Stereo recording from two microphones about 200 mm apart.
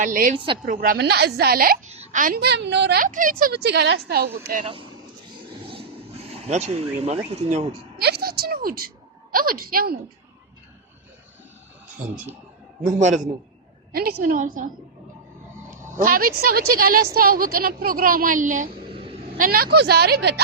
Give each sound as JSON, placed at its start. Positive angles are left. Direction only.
{"t": 0.0, "sound": "a woman's voice", "side_deg": -45}
{"t": 0.3, "sound": "speech", "side_deg": -25}
{"t": 0.6, "sound": "a woman's voice", "side_deg": -45}
{"t": 1.9, "sound": "a woman's voice", "side_deg": -35}
{"t": 3.0, "sound": "a woman's voice", "side_deg": -40}
{"t": 4.6, "sound": "speech", "side_deg": -25}
{"t": 6.3, "sound": "speech", "side_deg": -35}
{"t": 7.9, "sound": "a woman's voice", "side_deg": -55}
{"t": 12.8, "sound": "speech", "side_deg": -40}
{"t": 13.9, "sound": "a woman's voice", "side_deg": -50}
{"t": 16.0, "sound": "a woman's voice", "side_deg": -45}